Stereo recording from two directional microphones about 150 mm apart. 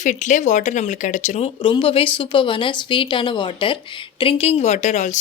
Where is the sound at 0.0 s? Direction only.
55° left (ahead or behind).